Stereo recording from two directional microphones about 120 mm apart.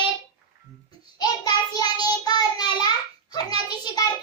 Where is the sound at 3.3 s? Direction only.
35° left (ahead or behind).